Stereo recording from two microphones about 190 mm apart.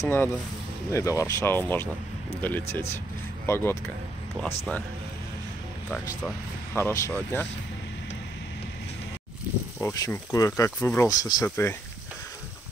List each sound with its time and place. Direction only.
0.0 s speech: 15° left (ahead or behind)
5.9 s speech: 10° left (ahead or behind)
9.8 s speech: 15° left (ahead or behind)